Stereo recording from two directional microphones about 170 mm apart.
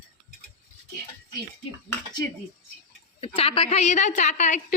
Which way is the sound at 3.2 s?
35° left (ahead or behind).